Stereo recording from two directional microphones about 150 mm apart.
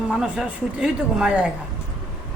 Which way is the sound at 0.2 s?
5° right (ahead or behind).